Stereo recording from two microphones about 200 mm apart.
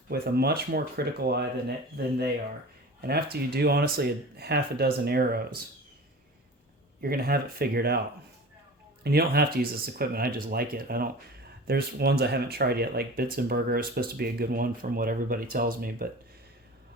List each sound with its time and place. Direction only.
0.1 s speech: 55° right (ahead or behind)
7.0 s speech: 50° right (ahead or behind)
9.0 s speech: 50° right (ahead or behind)